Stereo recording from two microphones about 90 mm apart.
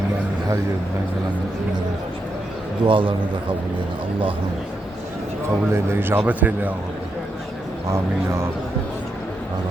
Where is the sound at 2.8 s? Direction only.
70° right (ahead or behind).